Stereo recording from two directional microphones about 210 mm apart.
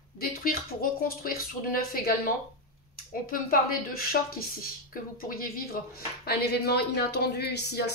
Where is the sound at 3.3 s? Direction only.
45° left (ahead or behind).